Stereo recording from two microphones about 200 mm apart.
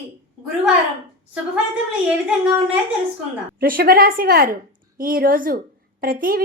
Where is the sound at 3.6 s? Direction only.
45° right (ahead or behind).